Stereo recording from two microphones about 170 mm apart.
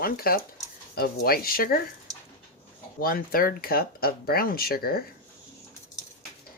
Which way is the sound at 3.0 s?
60° left (ahead or behind).